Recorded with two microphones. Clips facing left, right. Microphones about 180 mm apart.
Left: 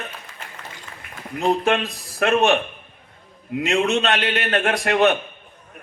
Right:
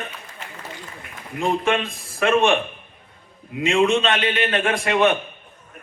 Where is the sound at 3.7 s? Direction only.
45° left (ahead or behind).